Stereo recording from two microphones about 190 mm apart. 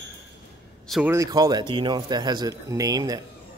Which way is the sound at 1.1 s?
20° right (ahead or behind).